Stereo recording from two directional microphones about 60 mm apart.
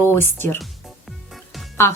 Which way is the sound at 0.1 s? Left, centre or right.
Left.